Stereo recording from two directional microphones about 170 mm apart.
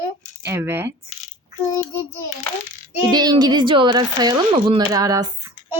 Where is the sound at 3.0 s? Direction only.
25° right (ahead or behind).